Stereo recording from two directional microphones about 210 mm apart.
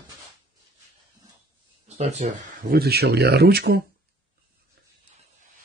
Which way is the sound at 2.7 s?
50° right (ahead or behind).